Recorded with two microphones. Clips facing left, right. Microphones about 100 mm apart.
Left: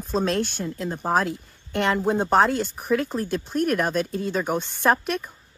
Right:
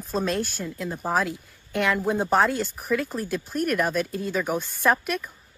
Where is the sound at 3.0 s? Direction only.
Centre (ahead or behind).